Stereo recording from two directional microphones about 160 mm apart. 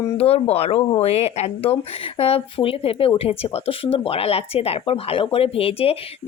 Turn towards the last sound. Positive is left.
turn(degrees=35)  # may be behind; listen again after turning